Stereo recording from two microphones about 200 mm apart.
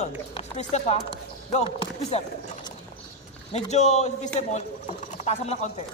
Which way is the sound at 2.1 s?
30° left (ahead or behind).